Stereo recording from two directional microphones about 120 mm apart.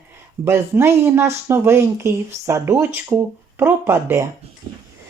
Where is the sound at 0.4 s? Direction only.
20° right (ahead or behind).